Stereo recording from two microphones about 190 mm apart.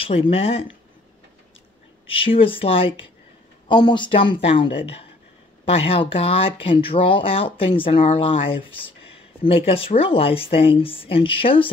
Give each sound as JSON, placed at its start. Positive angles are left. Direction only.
{"t": 0.0, "sound": "speech", "side_deg": 30}
{"t": 2.0, "sound": "speech", "side_deg": 30}